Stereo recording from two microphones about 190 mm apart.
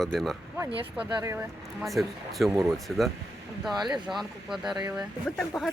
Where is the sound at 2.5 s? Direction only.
15° right (ahead or behind).